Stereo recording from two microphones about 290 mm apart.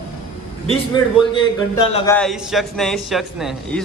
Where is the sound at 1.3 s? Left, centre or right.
Centre.